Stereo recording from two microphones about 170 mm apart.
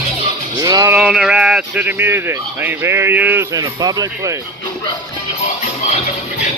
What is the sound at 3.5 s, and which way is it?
Speech, 20° right (ahead or behind).